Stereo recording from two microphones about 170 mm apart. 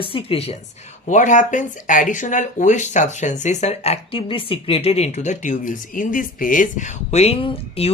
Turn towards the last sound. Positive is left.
turn(degrees=35)  # may be behind; listen again after turning